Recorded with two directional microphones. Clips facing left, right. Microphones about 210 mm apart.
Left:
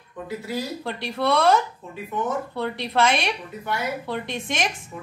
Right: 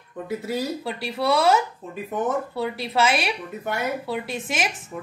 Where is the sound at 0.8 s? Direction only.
5° right (ahead or behind).